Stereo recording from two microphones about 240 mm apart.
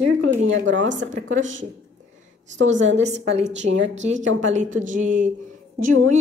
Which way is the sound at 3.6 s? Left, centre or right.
Right.